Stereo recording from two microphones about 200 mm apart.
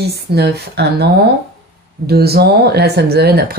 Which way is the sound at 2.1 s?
50° right (ahead or behind).